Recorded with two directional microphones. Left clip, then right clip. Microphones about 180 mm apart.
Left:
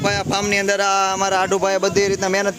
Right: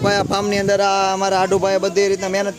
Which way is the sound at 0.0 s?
40° right (ahead or behind).